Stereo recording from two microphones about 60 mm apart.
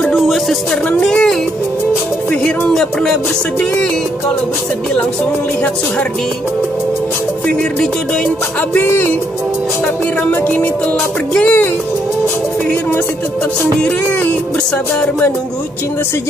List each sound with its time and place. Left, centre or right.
0.1 s music: centre
2.7 s music: centre
8.5 s music: left
10.3 s music: left
15.0 s music: left